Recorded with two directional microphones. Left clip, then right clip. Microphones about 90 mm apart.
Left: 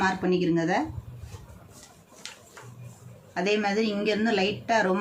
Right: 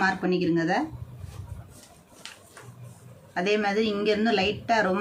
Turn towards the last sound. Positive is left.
turn(degrees=-25)  # may be behind; listen again after turning